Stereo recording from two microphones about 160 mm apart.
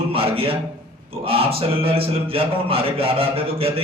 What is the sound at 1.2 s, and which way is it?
Speech, 35° right (ahead or behind).